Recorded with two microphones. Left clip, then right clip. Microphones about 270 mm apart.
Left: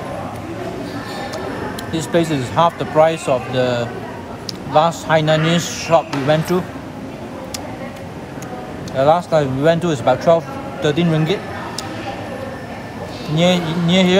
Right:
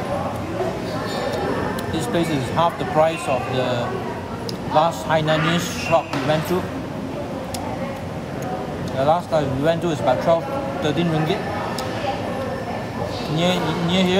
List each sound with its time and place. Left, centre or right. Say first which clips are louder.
1.9 s a man's voice: left 7 dB; left
8.9 s a man's voice: left 5 dB; left
13.4 s a man's voice: left 5 dB; left